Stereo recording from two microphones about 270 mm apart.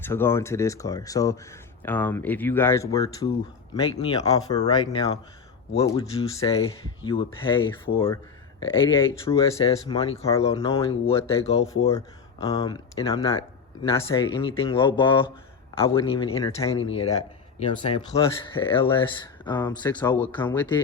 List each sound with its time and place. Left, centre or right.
0.0 s speech: centre
5.7 s speech: centre
11.9 s speech: centre